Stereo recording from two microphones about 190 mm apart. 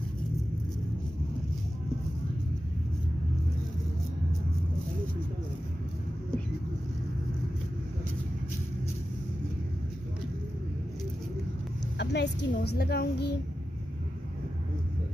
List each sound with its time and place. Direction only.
12.0 s a woman's voice: 65° left (ahead or behind)